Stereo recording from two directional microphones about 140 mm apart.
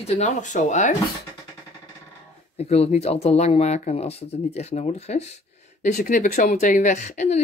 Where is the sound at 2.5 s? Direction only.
45° left (ahead or behind).